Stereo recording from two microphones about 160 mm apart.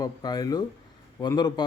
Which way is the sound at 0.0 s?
25° left (ahead or behind).